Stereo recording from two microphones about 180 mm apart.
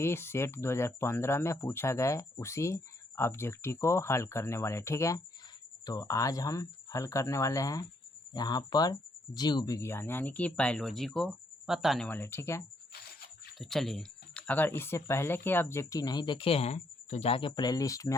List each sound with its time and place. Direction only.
0.0 s speech: 15° left (ahead or behind)
12.9 s a sound: 60° left (ahead or behind)
13.6 s speech: centre (ahead or behind); by 18.1 s 20° left (ahead or behind)